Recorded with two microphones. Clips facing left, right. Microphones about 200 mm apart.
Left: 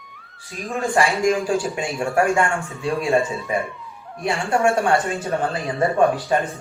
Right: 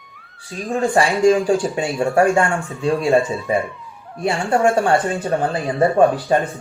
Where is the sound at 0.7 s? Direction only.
15° right (ahead or behind).